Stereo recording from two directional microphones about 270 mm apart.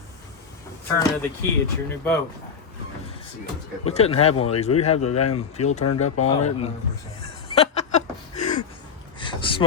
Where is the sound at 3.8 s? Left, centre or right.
Left.